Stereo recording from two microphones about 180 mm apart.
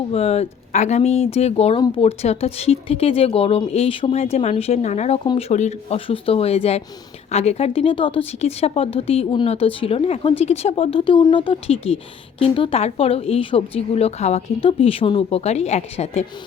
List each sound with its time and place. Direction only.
0.1 s speech: 35° left (ahead or behind)